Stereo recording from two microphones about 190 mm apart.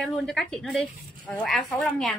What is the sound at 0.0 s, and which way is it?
Speech, centre (ahead or behind).